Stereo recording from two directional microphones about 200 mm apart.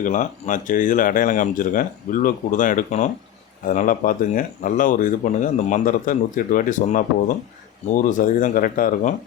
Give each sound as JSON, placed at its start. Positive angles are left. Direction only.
{"t": 0.0, "sound": "speech", "side_deg": 40}